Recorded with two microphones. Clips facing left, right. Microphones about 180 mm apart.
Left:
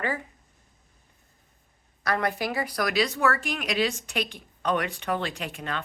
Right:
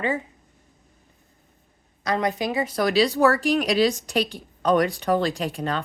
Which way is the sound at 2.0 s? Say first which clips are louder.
Right 3 dB; 20° right (ahead or behind).